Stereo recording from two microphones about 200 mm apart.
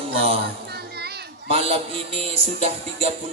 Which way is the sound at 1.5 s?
30° right (ahead or behind).